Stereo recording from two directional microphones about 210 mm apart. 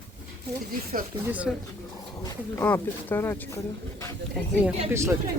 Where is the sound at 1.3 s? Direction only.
5° right (ahead or behind).